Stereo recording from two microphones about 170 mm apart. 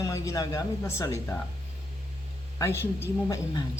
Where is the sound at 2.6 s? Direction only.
15° left (ahead or behind).